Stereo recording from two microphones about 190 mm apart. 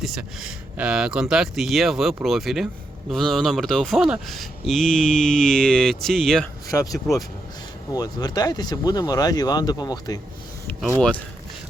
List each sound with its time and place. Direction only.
0.0 s speech: 5° right (ahead or behind)
6.7 s speech: 15° left (ahead or behind)
10.8 s speech: centre (ahead or behind)